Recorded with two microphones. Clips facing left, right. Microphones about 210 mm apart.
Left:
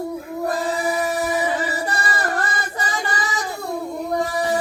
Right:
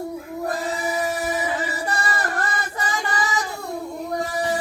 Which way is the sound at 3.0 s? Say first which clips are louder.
Right 1 dB; 35° left (ahead or behind).